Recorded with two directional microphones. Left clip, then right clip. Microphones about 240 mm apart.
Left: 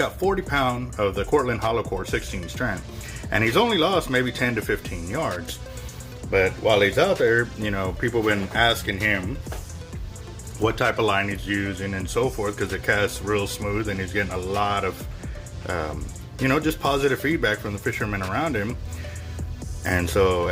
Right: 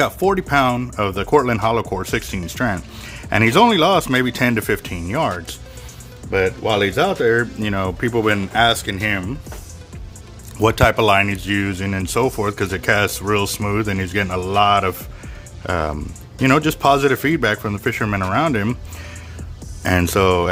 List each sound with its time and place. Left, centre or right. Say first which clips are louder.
0.0 s speech: right 6 dB; right
6.3 s speech: right 2 dB; right
10.6 s speech: right 7 dB; right
19.8 s speech: right 5 dB; right